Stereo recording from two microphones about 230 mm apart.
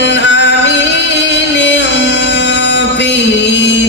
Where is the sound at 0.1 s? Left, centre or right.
Left.